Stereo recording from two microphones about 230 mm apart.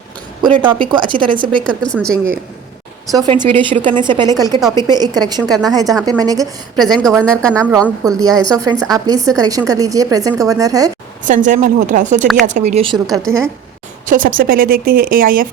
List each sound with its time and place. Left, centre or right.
0.7 s a woman's voice: right
1.8 s speech: centre
3.1 s a woman's voice: centre
5.4 s speech: centre
5.6 s a woman's voice: centre
6.7 s speech: centre
8.2 s a woman's voice: centre
11.3 s a woman's voice: right
13.3 s a woman's voice: centre
14.1 s speech: right